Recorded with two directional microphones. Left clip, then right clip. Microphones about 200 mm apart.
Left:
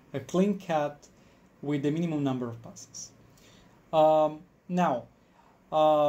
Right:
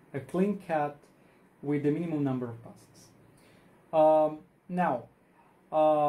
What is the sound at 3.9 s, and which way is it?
Speech, 45° left (ahead or behind).